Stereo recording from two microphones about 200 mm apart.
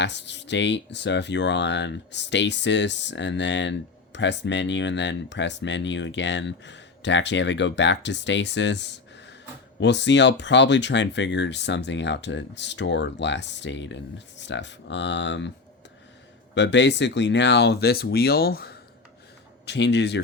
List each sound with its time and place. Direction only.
0.0 s speech: 60° left (ahead or behind)
16.6 s speech: 60° left (ahead or behind)